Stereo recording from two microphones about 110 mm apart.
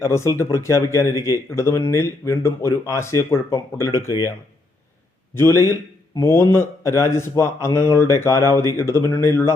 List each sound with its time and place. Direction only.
0.0 s speech: 25° left (ahead or behind)
5.3 s speech: 25° left (ahead or behind)